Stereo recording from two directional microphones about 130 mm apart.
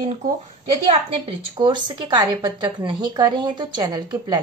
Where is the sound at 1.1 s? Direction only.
40° right (ahead or behind).